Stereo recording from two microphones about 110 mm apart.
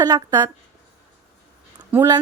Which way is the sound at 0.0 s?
35° right (ahead or behind).